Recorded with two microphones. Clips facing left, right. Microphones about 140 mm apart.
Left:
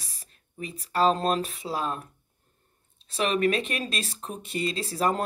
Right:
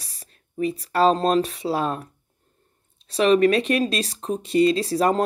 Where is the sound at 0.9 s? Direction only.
35° right (ahead or behind).